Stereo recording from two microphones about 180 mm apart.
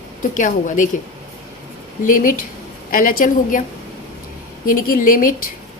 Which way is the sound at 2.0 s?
50° left (ahead or behind).